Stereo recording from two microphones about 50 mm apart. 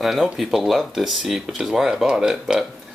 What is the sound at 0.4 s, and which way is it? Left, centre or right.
Speech, centre.